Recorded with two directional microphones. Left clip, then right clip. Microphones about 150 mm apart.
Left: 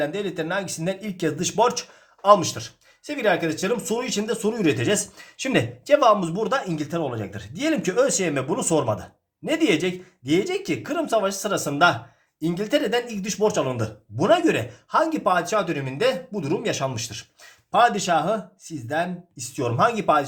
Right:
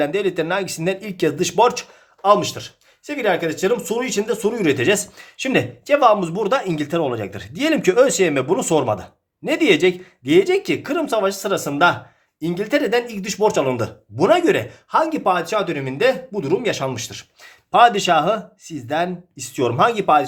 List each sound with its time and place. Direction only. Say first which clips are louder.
0.0 s speech: right 6 dB; 45° right (ahead or behind)
2.2 s speech: right 1 dB; 15° right (ahead or behind)
17.7 s speech: right 5 dB; 35° right (ahead or behind)